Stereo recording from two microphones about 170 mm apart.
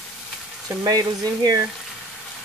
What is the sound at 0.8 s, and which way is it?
Speech, 20° right (ahead or behind).